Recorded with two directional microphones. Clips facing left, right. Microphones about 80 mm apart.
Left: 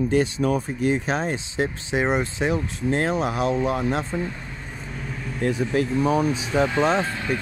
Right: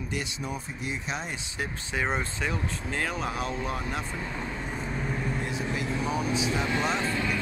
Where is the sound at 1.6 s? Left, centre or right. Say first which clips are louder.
Left 7 dB; left.